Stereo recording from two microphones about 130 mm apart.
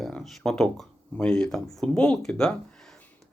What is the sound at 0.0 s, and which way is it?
Speech, 5° left (ahead or behind).